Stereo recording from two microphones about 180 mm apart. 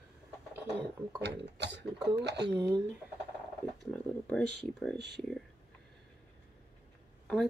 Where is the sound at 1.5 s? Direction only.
80° right.